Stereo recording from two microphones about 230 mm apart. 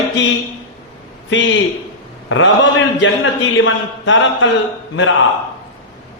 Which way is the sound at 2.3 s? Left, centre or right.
Left.